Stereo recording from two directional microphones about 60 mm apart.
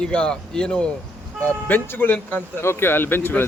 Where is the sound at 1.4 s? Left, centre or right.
Left.